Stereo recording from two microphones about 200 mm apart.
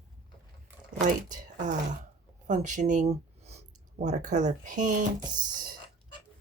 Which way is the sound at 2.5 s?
40° right (ahead or behind).